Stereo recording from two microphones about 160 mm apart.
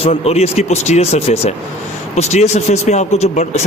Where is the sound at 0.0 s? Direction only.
40° left (ahead or behind).